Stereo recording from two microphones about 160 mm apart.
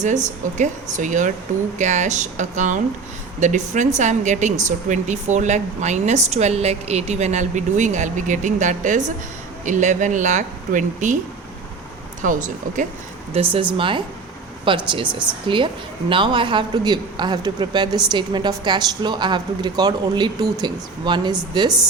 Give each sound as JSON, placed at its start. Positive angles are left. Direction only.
{"t": 0.0, "sound": "speech", "side_deg": -50}
{"t": 12.2, "sound": "speech", "side_deg": -55}
{"t": 13.3, "sound": "a woman's voice", "side_deg": -35}